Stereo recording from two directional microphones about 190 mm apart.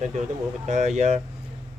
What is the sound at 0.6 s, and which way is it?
Speech, 35° right (ahead or behind).